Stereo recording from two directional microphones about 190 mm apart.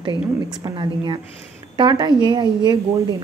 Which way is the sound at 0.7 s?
25° right (ahead or behind).